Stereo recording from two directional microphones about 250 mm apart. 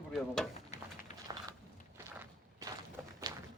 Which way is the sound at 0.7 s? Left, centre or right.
Left.